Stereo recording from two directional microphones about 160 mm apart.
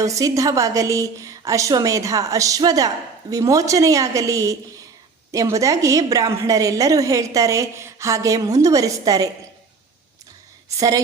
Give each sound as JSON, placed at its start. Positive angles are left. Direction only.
{"t": 0.0, "sound": "a woman's voice", "side_deg": -20}
{"t": 10.7, "sound": "a woman's voice", "side_deg": -20}